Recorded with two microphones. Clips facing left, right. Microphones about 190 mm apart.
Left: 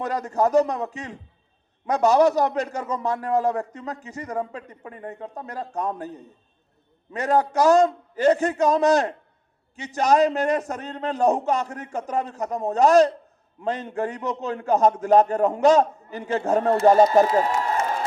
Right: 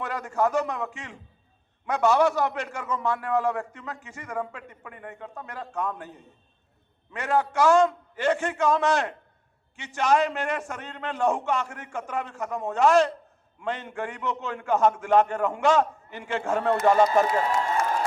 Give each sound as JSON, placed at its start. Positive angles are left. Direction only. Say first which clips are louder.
{"t": 0.0, "sound": "a man's voice", "louder": "left 3 dB", "side_deg": 40}